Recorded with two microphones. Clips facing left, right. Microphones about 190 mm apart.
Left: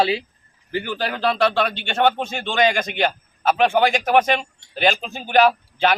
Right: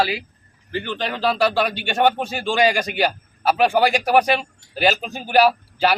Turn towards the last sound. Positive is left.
turn(degrees=-5)  # may be behind; listen again after turning